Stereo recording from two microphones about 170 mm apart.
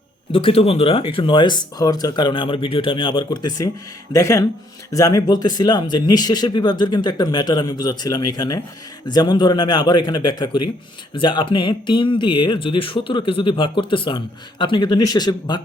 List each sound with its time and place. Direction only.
0.3 s speech: 35° left (ahead or behind)